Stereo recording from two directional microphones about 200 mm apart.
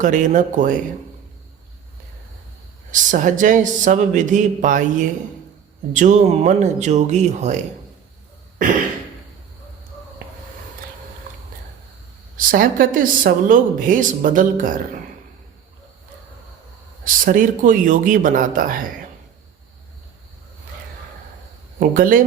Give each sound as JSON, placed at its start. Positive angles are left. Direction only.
{"t": 0.0, "sound": "speech", "side_deg": -40}
{"t": 2.9, "sound": "speech", "side_deg": -40}
{"t": 12.4, "sound": "speech", "side_deg": -45}
{"t": 17.0, "sound": "speech", "side_deg": -45}
{"t": 21.8, "sound": "speech", "side_deg": -45}